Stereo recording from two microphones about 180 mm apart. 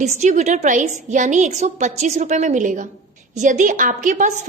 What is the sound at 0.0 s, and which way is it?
A woman's voice, 40° right (ahead or behind).